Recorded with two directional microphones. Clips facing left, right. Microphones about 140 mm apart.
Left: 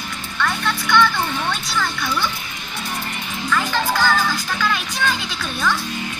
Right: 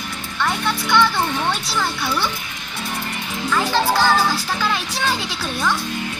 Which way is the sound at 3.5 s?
30° right (ahead or behind).